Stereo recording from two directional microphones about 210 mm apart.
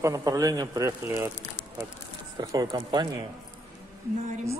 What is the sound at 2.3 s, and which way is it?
Speech, 20° right (ahead or behind).